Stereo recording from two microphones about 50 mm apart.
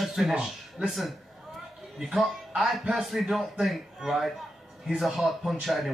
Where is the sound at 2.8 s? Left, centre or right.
Centre.